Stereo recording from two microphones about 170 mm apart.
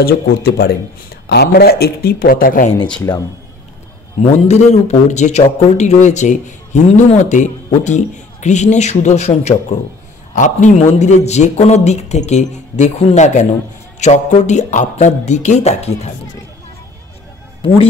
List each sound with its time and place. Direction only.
0.0 s speech: 65° left (ahead or behind)
3.1 s a man's voice: 20° left (ahead or behind)
4.3 s speech: 40° left (ahead or behind)
17.6 s speech: 30° left (ahead or behind)